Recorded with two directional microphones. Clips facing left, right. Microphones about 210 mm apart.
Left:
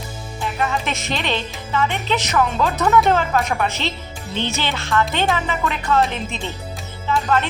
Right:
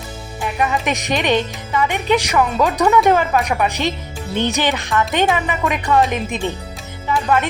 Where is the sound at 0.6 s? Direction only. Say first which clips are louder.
Right 4 dB; 15° right (ahead or behind).